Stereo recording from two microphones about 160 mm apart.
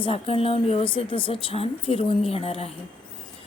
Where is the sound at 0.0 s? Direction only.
35° left (ahead or behind).